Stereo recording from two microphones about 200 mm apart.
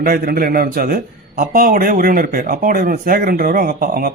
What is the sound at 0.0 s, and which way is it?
A man's voice, 50° right (ahead or behind).